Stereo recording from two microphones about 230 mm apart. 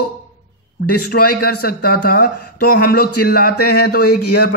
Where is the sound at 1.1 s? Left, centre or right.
Left.